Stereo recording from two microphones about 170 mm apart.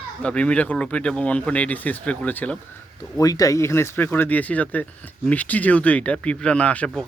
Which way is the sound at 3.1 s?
20° left (ahead or behind).